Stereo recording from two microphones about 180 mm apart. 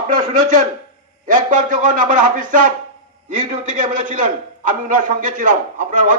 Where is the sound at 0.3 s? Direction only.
45° right (ahead or behind).